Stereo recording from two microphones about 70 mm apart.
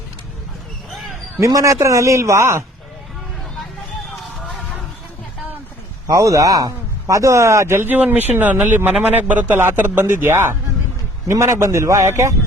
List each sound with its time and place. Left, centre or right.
1.4 s a man's voice: right
6.1 s a man's voice: right
7.9 s a man's voice: right